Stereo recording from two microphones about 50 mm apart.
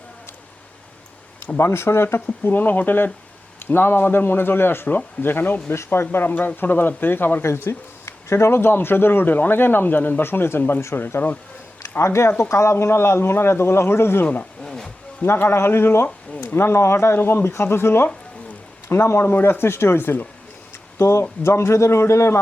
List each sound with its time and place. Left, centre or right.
1.5 s a man's voice: left
2.2 s speech: left
5.7 s speech: left
7.4 s speech: left
11.8 s a man's voice: left
14.6 s wild animals: centre
15.2 s a man's voice: left
17.2 s speech: left
21.0 s a man's voice: left